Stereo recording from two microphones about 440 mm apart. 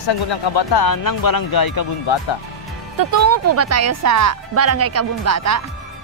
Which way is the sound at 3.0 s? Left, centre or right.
Right.